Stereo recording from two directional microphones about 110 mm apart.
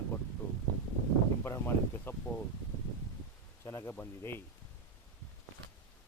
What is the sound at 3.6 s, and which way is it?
Speech, 20° left (ahead or behind).